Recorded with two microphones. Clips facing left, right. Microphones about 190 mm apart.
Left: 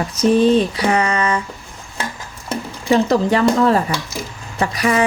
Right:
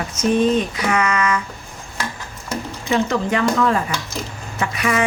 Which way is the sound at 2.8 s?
35° left (ahead or behind).